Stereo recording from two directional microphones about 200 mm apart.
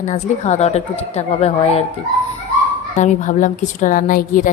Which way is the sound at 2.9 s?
40° left (ahead or behind).